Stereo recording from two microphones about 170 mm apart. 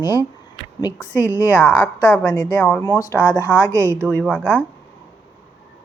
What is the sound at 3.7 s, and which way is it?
Speech, 15° right (ahead or behind).